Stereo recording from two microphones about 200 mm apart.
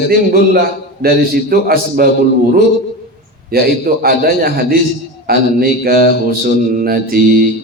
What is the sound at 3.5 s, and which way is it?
A man's voice, 50° right (ahead or behind).